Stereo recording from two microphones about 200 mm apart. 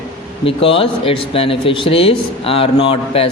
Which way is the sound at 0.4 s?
25° left (ahead or behind).